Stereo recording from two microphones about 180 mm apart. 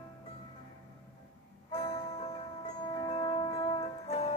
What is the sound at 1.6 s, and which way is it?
Music, 30° left (ahead or behind).